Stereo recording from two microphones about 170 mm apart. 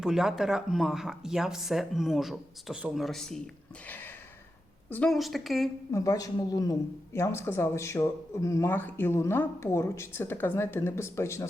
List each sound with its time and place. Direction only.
0.0 s speech: 5° right (ahead or behind)
5.9 s speech: 20° left (ahead or behind)